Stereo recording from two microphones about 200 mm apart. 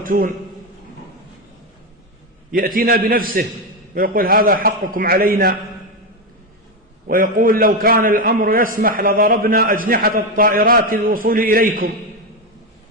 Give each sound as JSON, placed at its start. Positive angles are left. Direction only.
{"t": 0.0, "sound": "a man's voice", "side_deg": -45}
{"t": 2.5, "sound": "a man's voice", "side_deg": -45}
{"t": 7.1, "sound": "a man's voice", "side_deg": -45}